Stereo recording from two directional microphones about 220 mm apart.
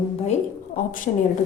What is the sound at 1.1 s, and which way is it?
Speech, 30° left (ahead or behind).